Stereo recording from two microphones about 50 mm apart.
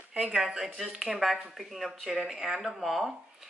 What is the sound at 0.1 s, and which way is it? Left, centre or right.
Speech, centre.